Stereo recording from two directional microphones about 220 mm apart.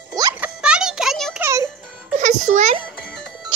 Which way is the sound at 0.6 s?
5° right (ahead or behind).